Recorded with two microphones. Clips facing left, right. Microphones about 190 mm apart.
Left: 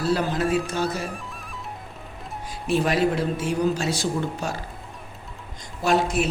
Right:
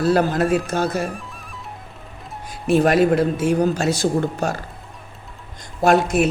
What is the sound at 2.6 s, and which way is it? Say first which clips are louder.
Speech: right 6 dB; 50° right (ahead or behind).